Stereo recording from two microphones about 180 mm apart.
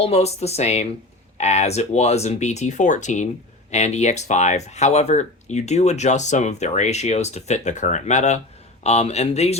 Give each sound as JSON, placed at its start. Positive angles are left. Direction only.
{"t": 0.0, "sound": "speech", "side_deg": 35}